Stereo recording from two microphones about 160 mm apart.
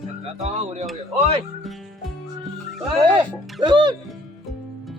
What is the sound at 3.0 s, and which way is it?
Speech, 30° right (ahead or behind).